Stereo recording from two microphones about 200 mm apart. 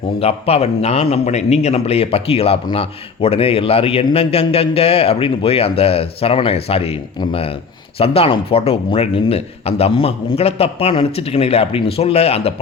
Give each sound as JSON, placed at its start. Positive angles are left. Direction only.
{"t": 0.2, "sound": "a man's voice", "side_deg": 30}